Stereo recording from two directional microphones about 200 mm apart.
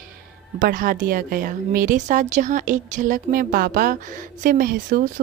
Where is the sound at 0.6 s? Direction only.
40° right (ahead or behind).